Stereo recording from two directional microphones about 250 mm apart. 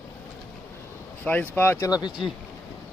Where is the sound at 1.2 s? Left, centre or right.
Centre.